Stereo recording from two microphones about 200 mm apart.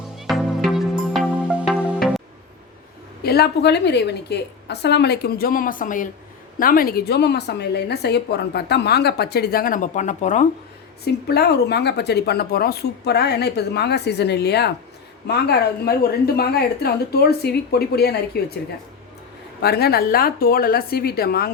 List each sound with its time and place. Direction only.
0.2 s music: centre (ahead or behind)
3.2 s a woman's voice: 55° left (ahead or behind); by 10.4 s 40° left (ahead or behind)
11.0 s a woman's voice: 55° left (ahead or behind)
19.6 s a woman's voice: 50° left (ahead or behind)